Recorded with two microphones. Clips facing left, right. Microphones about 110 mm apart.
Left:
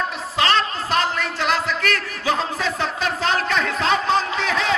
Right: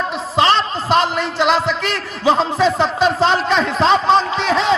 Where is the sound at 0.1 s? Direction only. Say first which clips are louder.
Right 5 dB; 25° right (ahead or behind).